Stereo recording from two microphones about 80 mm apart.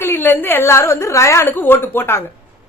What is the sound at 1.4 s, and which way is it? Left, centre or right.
Speech, left.